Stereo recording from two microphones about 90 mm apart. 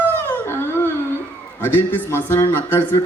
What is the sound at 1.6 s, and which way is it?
Speech, 20° left (ahead or behind).